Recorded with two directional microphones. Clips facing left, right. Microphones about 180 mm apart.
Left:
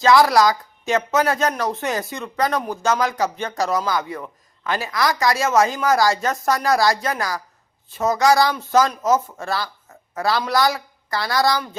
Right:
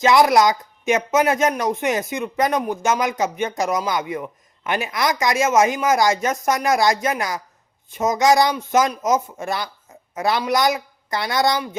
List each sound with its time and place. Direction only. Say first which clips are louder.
0.0 s speech: even; 20° right (ahead or behind)